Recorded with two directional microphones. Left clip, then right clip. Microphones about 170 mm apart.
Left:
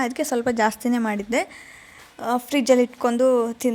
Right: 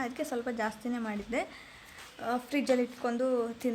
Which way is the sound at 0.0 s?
40° left (ahead or behind).